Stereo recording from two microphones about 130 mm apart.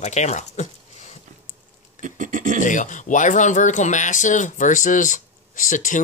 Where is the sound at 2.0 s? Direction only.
75° right (ahead or behind).